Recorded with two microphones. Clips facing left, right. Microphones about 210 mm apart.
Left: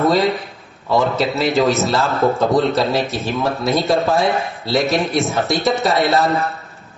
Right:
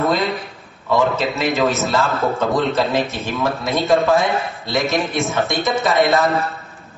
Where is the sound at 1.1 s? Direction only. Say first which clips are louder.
Left 3 dB; 35° left (ahead or behind).